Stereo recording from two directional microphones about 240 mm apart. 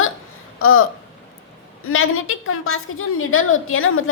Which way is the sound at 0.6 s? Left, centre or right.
Left.